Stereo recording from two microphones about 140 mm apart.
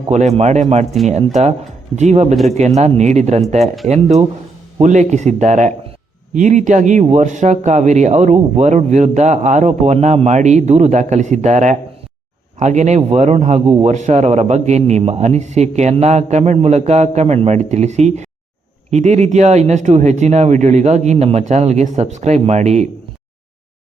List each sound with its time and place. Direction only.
0.1 s a man's voice: 55° right (ahead or behind)
2.0 s a man's voice: 55° right (ahead or behind)
2.3 s speech: centre (ahead or behind)
2.6 s a man's voice: 55° right (ahead or behind)